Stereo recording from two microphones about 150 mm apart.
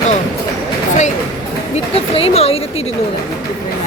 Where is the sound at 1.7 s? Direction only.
40° left (ahead or behind).